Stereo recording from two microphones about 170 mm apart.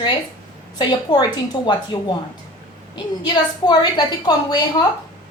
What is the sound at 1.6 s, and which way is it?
A woman's voice, 25° left (ahead or behind).